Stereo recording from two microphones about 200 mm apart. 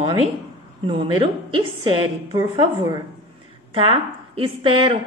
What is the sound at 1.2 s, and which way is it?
A woman's voice, 25° right (ahead or behind).